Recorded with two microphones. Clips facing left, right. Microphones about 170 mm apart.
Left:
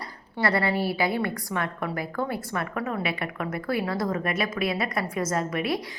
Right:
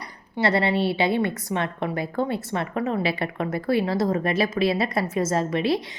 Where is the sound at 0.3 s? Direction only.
25° right (ahead or behind).